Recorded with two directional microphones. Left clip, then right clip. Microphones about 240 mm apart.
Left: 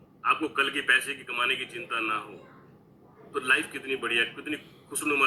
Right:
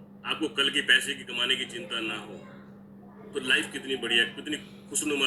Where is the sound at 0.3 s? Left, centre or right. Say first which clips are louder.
Left 2 dB; centre.